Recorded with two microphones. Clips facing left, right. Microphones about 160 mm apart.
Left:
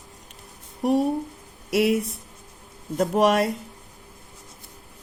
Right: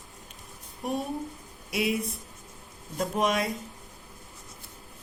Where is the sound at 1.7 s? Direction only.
70° left (ahead or behind).